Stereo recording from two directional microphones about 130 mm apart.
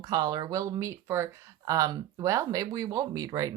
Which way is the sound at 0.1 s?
30° right (ahead or behind).